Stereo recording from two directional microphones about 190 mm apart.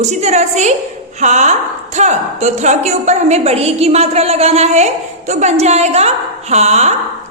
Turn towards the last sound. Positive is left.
turn(degrees=-35)  # may be behind; listen again after turning